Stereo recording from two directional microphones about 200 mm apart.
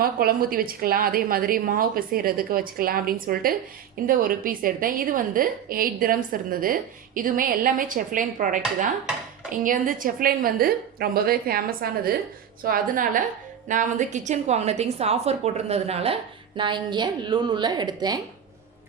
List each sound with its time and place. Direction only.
0.0 s a woman's voice: 50° right (ahead or behind); by 18.2 s 20° right (ahead or behind)